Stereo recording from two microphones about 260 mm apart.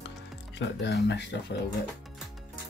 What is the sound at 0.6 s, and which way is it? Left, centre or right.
Speech, left.